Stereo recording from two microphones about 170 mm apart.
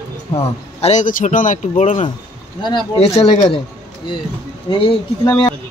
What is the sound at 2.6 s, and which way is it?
Speech, 25° left (ahead or behind).